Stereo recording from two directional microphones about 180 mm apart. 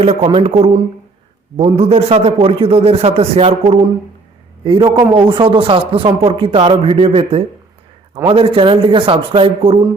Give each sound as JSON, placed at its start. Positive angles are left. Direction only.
{"t": 0.0, "sound": "a man's voice", "side_deg": -35}